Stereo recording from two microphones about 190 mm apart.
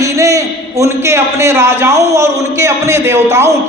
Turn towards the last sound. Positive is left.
turn(degrees=-15)  # may be behind; listen again after turning